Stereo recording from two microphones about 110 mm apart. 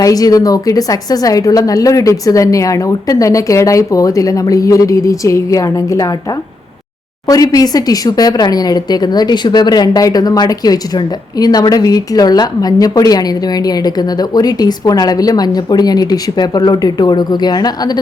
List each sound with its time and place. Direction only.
0.0 s a woman's voice: 35° left (ahead or behind)
7.3 s a woman's voice: 35° left (ahead or behind)